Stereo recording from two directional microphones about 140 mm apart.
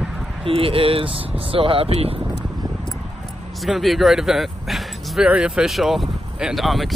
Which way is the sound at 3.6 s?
Centre (ahead or behind).